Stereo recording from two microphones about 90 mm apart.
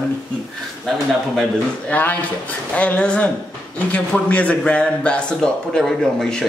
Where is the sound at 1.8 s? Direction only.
15° left (ahead or behind).